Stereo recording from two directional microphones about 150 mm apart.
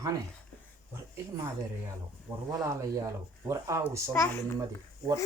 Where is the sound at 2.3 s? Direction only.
15° right (ahead or behind).